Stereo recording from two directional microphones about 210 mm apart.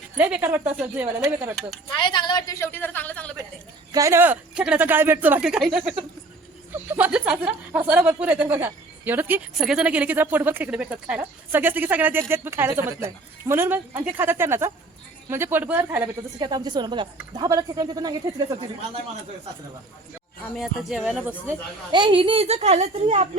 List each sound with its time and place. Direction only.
0.2 s speech: 5° right (ahead or behind)
2.0 s a woman's voice: 20° left (ahead or behind)
3.9 s speech: 15° right (ahead or behind)
6.9 s speech: 5° right (ahead or behind)
16.4 s a woman's voice: 20° right (ahead or behind)
20.6 s speech: 5° right (ahead or behind)
21.9 s a woman's voice: 25° right (ahead or behind)